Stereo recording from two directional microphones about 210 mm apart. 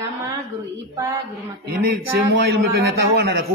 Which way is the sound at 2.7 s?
50° right (ahead or behind).